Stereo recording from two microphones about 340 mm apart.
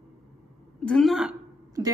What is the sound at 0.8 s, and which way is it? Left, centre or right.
Speech, centre.